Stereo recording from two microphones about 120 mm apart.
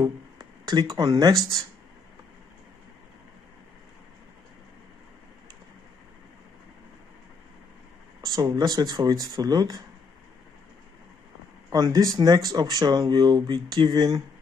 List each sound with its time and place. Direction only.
0.0 s speech: 30° right (ahead or behind)
8.2 s speech: 30° right (ahead or behind)
11.7 s speech: 30° right (ahead or behind)